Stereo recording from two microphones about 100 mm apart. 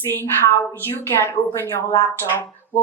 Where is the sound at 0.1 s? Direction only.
20° left (ahead or behind).